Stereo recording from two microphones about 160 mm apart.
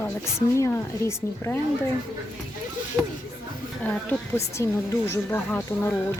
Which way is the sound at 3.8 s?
10° left (ahead or behind).